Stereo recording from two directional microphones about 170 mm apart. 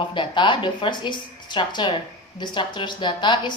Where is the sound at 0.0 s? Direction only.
30° left (ahead or behind).